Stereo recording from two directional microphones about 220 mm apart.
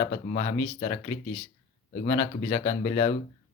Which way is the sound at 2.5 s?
35° left (ahead or behind).